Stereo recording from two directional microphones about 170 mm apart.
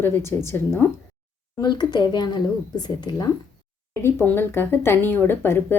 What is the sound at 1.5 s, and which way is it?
Speech, 25° left (ahead or behind).